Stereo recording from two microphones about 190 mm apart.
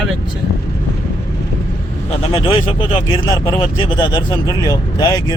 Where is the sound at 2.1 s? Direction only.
30° left (ahead or behind).